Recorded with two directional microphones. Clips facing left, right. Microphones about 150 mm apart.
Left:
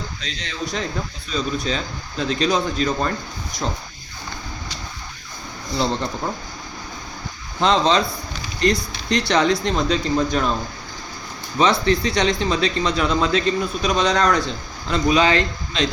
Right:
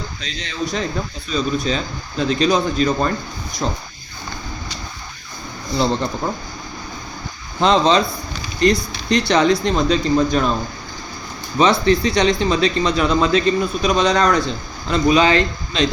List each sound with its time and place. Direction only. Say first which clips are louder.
0.2 s speech: right 6 dB; 5° right (ahead or behind)
7.6 s speech: right 3 dB; 15° right (ahead or behind)
11.5 s speech: right 3 dB; 15° right (ahead or behind)
14.8 s a man's voice: right 3 dB; 20° right (ahead or behind)